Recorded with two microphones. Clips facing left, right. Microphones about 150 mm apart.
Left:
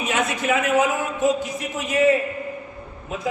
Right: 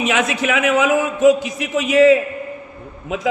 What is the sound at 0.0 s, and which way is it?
A man's voice, 90° right.